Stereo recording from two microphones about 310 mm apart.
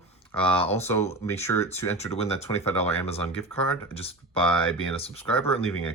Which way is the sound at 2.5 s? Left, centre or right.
Centre.